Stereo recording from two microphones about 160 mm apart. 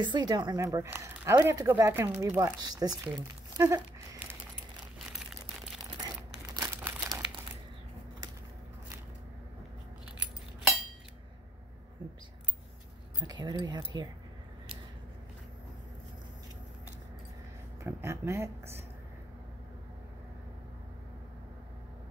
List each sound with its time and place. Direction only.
0.0 s speech: 30° right (ahead or behind)
3.6 s a sound: 15° right (ahead or behind)
5.9 s crumpling: 25° right (ahead or behind)
13.2 s speech: 25° right (ahead or behind)
17.8 s speech: 15° right (ahead or behind)